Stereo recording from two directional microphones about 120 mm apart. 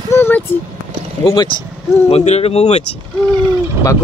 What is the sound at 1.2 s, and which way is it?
Speech, 40° left (ahead or behind).